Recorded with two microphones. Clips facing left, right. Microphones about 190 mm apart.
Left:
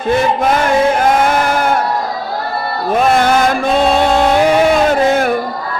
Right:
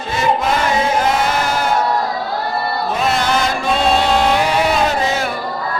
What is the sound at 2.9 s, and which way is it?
Chant, 50° left (ahead or behind).